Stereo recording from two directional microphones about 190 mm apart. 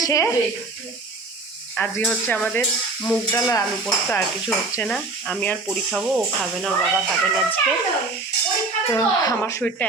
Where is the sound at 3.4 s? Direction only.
15° left (ahead or behind).